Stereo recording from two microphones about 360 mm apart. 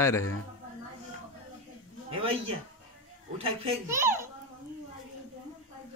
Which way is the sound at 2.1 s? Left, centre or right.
Centre.